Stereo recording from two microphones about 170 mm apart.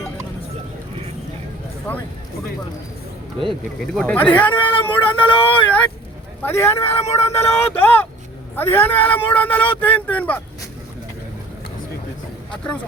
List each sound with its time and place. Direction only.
3.9 s speech: 5° left (ahead or behind)
4.6 s speech: 30° left (ahead or behind)
5.6 s speech: 10° left (ahead or behind)
7.0 s speech: 40° left (ahead or behind)
7.3 s speech: 15° left (ahead or behind)